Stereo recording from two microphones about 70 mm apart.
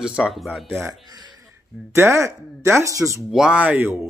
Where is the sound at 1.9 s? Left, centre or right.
Right.